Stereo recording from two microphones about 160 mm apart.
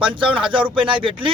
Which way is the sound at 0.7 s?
30° right (ahead or behind).